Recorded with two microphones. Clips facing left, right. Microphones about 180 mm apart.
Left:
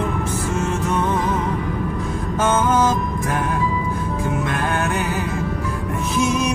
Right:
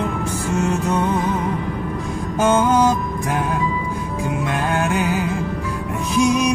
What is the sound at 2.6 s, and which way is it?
Mantra, 15° right (ahead or behind).